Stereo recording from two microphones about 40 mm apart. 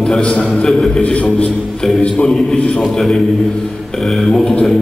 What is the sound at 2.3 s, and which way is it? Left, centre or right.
A man's voice, centre.